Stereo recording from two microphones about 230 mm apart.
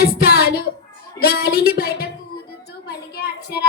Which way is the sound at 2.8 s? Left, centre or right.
Left.